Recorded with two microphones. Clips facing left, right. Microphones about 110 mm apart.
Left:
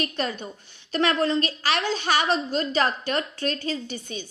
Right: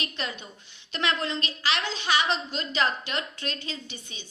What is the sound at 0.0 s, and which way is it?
A woman's voice, 40° left (ahead or behind).